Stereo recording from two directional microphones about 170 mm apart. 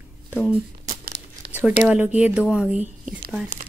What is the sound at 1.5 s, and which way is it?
Speech, 10° right (ahead or behind).